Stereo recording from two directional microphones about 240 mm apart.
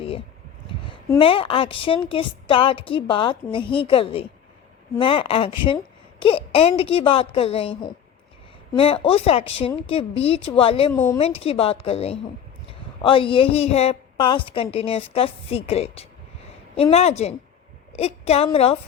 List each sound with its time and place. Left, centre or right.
0.9 s a woman's voice: left
10.9 s speech: centre
11.2 s a woman's voice: left